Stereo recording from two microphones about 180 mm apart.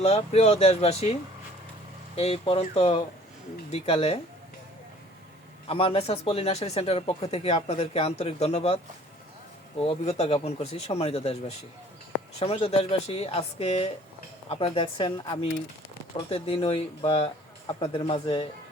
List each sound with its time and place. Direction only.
0.0 s speech: 35° left (ahead or behind)
5.6 s speech: 30° left (ahead or behind)
9.8 s speech: 35° left (ahead or behind)